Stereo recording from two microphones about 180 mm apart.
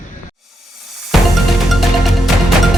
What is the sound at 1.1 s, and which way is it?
Music, centre (ahead or behind).